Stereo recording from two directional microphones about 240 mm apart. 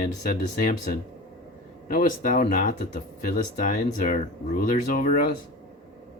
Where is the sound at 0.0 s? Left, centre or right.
Left.